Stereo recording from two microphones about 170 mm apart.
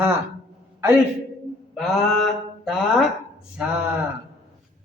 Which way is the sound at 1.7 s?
Centre (ahead or behind).